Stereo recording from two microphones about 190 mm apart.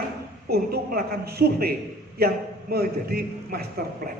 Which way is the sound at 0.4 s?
55° right (ahead or behind).